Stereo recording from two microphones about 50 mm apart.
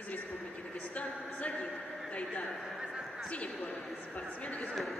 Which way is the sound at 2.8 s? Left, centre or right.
Centre.